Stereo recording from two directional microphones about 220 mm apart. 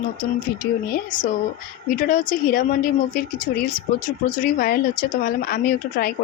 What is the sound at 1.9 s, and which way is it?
A woman's voice, 40° left (ahead or behind).